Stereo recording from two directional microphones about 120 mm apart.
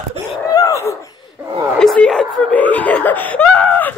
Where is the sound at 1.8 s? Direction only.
5° left (ahead or behind).